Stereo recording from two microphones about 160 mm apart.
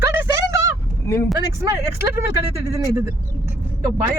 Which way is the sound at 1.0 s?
15° left (ahead or behind).